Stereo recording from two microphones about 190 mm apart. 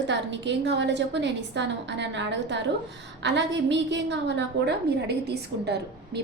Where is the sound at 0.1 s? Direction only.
65° right (ahead or behind).